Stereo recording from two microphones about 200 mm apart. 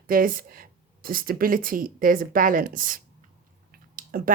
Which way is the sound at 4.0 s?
45° right (ahead or behind).